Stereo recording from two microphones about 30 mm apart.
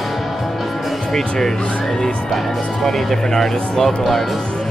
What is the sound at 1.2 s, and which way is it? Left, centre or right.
Speech, centre.